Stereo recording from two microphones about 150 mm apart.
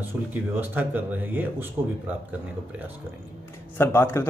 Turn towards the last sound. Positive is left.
turn(degrees=15)  # may be behind; listen again after turning